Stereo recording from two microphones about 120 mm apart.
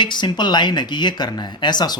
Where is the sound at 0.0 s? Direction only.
40° left (ahead or behind).